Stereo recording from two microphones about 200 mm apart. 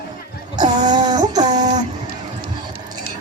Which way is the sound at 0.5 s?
20° right (ahead or behind).